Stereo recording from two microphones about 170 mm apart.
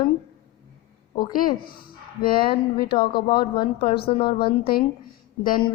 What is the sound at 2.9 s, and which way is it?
Speech, 30° left (ahead or behind).